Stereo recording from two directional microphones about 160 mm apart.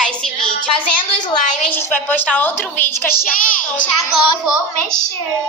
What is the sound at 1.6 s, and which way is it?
A woman's voice, 10° left (ahead or behind).